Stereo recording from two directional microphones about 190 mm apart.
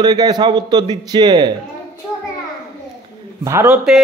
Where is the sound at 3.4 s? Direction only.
10° right (ahead or behind).